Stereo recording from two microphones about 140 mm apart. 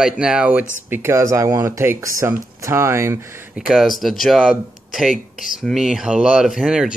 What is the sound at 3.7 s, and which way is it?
Speech, centre (ahead or behind).